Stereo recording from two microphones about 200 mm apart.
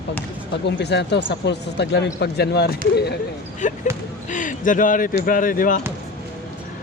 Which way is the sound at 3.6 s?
40° left (ahead or behind).